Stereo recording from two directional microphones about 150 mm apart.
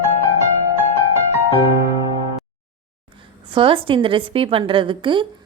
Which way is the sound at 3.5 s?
35° right (ahead or behind).